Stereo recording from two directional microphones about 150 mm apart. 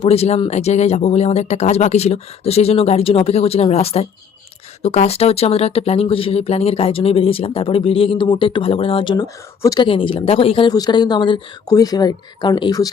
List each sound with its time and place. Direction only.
0.0 s speech: 45° left (ahead or behind)
10.7 s speech: 25° left (ahead or behind)